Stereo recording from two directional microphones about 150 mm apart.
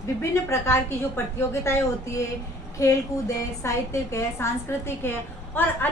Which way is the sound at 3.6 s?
20° left (ahead or behind).